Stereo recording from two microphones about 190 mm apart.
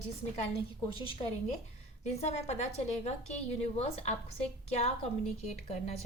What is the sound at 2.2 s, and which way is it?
A woman's voice, 35° left (ahead or behind).